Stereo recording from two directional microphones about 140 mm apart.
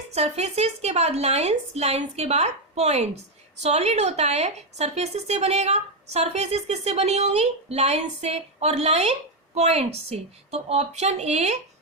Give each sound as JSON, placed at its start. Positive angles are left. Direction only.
{"t": 0.1, "sound": "a woman's voice", "side_deg": -50}